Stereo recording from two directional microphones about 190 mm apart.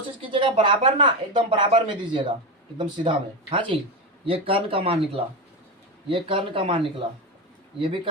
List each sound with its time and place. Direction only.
0.2 s speech: 25° right (ahead or behind)